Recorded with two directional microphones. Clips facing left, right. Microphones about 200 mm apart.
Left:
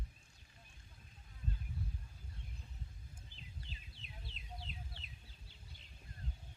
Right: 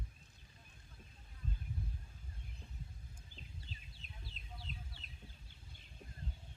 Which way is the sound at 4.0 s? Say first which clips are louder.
Left 1 dB; 40° right (ahead or behind).